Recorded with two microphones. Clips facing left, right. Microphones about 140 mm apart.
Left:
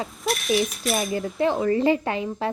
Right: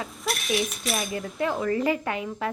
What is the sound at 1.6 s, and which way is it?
Speech, 25° left (ahead or behind).